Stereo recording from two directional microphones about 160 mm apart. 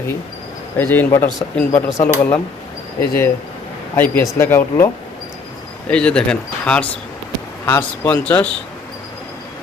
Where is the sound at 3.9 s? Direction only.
15° left (ahead or behind).